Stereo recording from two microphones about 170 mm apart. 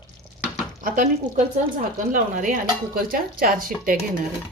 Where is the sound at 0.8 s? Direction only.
50° right (ahead or behind).